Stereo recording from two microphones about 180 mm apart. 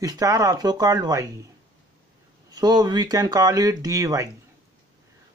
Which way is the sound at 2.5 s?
20° right (ahead or behind).